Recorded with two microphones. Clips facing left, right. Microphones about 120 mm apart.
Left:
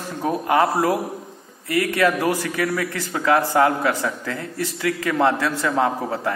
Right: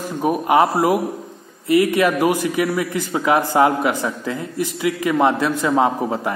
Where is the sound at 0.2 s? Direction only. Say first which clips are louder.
Right 3 dB; 15° right (ahead or behind).